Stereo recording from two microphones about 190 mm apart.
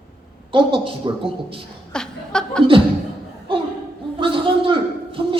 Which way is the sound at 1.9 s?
5° left (ahead or behind).